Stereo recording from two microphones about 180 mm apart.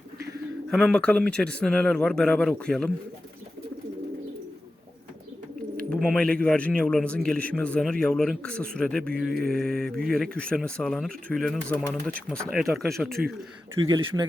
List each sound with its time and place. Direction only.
0.7 s speech: 5° left (ahead or behind)
5.9 s a man's voice: 5° left (ahead or behind)
13.8 s speech: 20° right (ahead or behind)